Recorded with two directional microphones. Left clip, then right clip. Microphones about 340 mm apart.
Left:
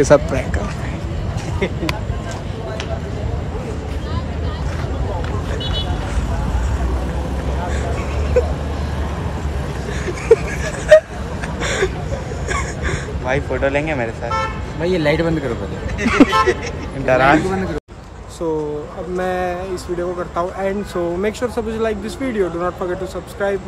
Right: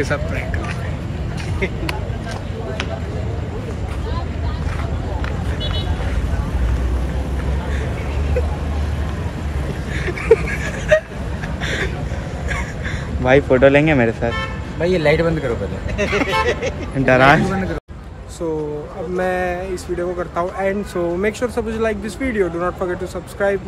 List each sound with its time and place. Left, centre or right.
0.0 s speech: centre
10.0 s vehicle: centre
11.6 s a sound: centre
13.2 s speech: right
14.8 s speech: centre
16.1 s speech: centre
17.0 s speech: right
19.1 s speech: centre